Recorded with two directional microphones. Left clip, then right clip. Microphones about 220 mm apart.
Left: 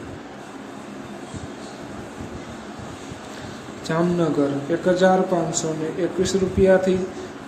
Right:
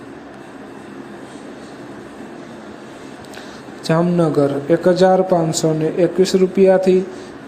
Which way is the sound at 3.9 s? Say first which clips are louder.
Right 5 dB; 30° right (ahead or behind).